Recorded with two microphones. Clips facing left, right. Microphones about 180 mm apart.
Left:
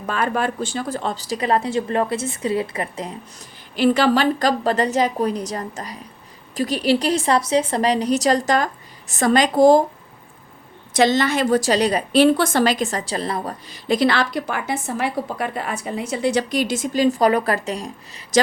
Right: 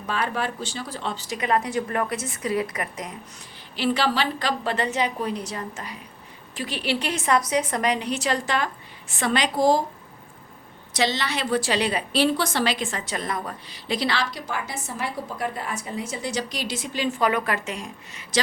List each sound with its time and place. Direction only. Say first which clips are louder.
0.0 s a woman's voice: left 5 dB; 50° left (ahead or behind); by 3.2 s 30° left (ahead or behind)
3.8 s a woman's voice: left 7 dB; 45° left (ahead or behind)
10.9 s a woman's voice: left 8 dB; 50° left (ahead or behind); by 13.6 s 30° left (ahead or behind)
13.7 s a woman's voice: left 9 dB; 45° left (ahead or behind)